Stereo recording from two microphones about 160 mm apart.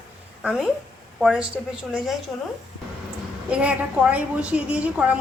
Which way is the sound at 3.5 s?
10° right (ahead or behind).